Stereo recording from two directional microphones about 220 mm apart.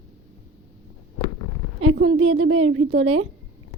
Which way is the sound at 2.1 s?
70° right (ahead or behind).